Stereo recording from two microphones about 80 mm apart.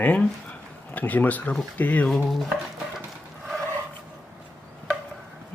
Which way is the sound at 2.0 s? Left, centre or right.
Centre.